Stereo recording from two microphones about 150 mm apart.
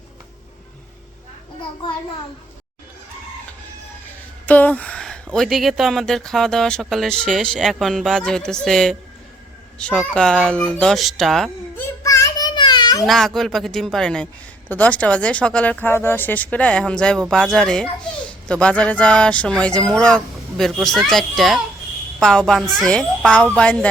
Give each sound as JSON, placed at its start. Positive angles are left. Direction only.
{"t": 4.4, "sound": "speech", "side_deg": 10}
{"t": 11.8, "sound": "child singing", "side_deg": 20}
{"t": 13.1, "sound": "speech", "side_deg": 0}